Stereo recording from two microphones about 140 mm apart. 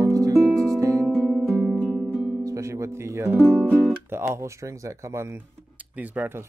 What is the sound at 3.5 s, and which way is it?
Music, 10° left (ahead or behind).